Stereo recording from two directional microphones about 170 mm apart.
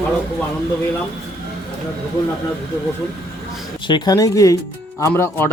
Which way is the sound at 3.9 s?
25° left (ahead or behind).